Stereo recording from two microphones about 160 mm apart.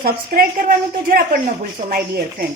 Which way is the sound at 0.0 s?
65° right (ahead or behind).